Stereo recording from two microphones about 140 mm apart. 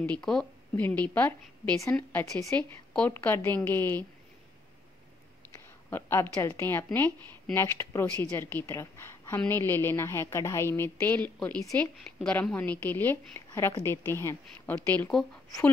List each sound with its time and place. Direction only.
0.0 s a woman's voice: 5° left (ahead or behind)
5.9 s a woman's voice: 15° left (ahead or behind)
15.0 s speech: 5° left (ahead or behind)